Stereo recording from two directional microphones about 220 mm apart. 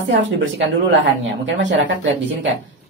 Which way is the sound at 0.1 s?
55° right (ahead or behind).